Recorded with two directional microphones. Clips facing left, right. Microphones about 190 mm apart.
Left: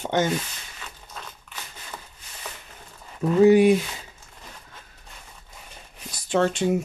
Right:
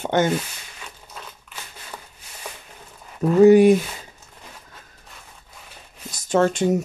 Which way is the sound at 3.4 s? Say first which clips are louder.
Right 4 dB; 45° right (ahead or behind).